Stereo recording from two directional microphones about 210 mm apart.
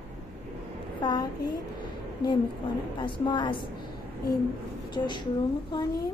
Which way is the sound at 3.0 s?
20° left (ahead or behind).